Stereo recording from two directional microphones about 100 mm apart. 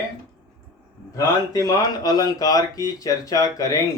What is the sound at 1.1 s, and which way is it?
Speech, 35° left (ahead or behind).